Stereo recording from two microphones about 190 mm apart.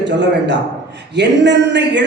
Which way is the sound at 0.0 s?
70° right (ahead or behind).